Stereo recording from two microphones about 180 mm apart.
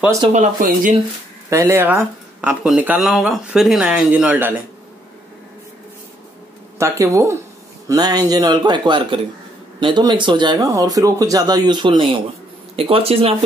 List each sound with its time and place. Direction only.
0.3 s speech: 45° right (ahead or behind)
1.5 s speech: 15° right (ahead or behind)
6.8 s speech: 15° right (ahead or behind); by 13.3 s 30° right (ahead or behind)